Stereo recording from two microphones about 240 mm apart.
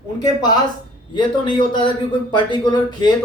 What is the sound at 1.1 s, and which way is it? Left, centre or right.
A man's voice, centre.